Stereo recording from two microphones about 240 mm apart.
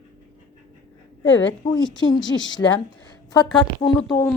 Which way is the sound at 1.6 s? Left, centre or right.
Centre.